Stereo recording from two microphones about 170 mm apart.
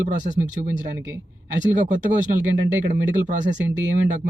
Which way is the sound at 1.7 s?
50° right (ahead or behind).